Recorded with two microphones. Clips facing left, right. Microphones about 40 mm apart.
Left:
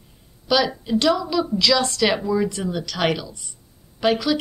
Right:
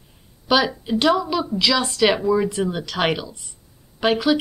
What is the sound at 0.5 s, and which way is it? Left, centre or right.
A woman's voice, right.